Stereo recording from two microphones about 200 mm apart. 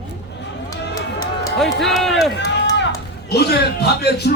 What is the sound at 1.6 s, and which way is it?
Speech, centre (ahead or behind).